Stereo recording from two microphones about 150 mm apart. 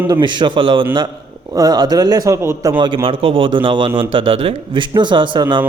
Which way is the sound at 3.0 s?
35° right (ahead or behind).